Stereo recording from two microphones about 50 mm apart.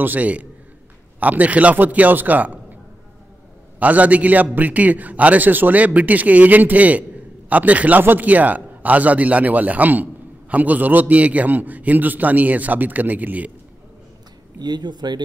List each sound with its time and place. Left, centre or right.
0.0 s a man's voice: right
3.8 s a man's voice: right